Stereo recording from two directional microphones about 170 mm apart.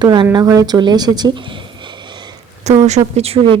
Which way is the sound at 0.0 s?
25° right (ahead or behind).